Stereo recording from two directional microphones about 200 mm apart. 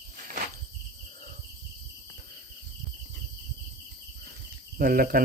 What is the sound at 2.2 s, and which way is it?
Cricket, 50° right (ahead or behind).